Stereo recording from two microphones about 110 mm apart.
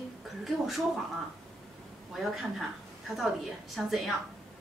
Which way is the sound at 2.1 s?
Centre (ahead or behind).